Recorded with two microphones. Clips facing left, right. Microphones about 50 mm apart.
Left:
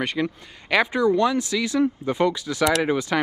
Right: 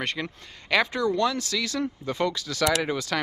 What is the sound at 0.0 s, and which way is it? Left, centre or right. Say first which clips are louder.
Speech: left 5 dB; centre.